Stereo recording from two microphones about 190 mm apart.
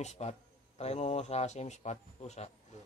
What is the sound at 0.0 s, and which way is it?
Speech, 35° left (ahead or behind).